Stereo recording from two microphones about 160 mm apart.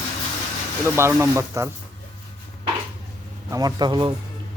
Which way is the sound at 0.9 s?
15° right (ahead or behind).